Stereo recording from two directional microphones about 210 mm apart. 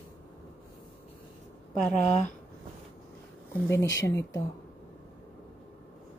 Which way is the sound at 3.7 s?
15° left (ahead or behind).